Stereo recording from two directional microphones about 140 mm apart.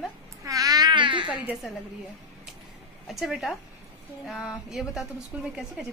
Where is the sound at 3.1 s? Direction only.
Centre (ahead or behind).